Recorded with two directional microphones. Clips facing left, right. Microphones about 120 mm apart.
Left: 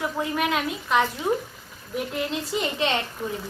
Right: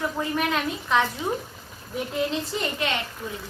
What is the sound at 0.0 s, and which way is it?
A woman's voice, 5° left (ahead or behind).